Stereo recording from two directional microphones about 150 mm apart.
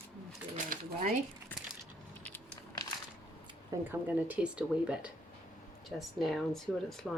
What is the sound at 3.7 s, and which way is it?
Speech, 20° right (ahead or behind).